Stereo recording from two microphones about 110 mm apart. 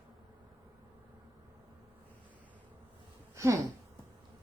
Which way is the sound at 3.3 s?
25° right (ahead or behind).